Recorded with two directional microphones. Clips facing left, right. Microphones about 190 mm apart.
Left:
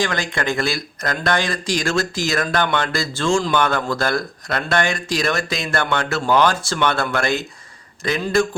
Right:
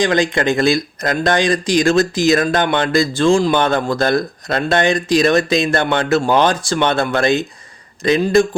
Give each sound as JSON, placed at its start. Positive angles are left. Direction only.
{"t": 0.0, "sound": "speech", "side_deg": -20}